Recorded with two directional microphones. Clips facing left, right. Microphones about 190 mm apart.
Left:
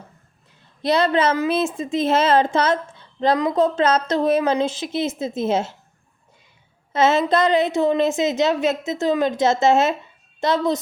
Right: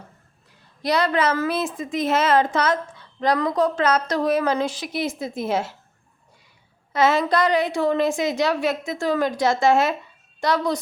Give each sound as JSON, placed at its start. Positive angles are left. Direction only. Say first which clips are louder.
{"t": 0.8, "sound": "a woman's voice", "louder": "left 3 dB", "side_deg": 25}
{"t": 6.9, "sound": "a woman's voice", "louder": "left 2 dB", "side_deg": 25}